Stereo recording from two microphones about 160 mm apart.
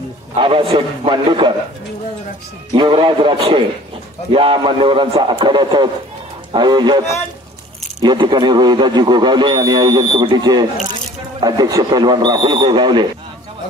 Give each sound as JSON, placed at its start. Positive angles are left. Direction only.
{"t": 0.4, "sound": "speech", "side_deg": -35}
{"t": 2.7, "sound": "speech", "side_deg": -30}